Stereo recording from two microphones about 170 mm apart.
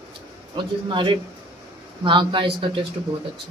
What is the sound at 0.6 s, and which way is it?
A man's voice, 30° right (ahead or behind).